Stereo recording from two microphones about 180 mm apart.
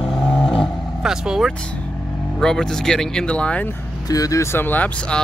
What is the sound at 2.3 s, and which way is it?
Speech, 5° left (ahead or behind).